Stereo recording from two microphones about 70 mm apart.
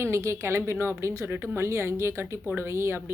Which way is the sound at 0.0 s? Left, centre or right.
Right.